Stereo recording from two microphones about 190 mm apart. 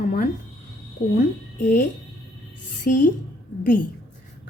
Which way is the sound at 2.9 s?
45° left (ahead or behind).